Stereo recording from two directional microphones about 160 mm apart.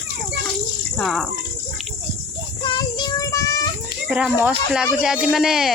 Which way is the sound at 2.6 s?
25° left (ahead or behind).